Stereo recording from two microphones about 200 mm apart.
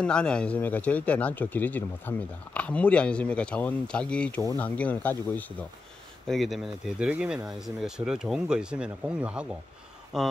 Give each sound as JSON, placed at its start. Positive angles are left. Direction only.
{"t": 0.0, "sound": "speech", "side_deg": 5}